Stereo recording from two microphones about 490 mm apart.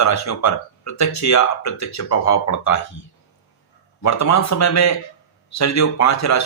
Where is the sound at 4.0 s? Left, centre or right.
Left.